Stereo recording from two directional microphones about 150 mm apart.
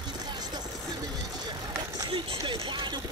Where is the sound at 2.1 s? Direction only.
35° right (ahead or behind).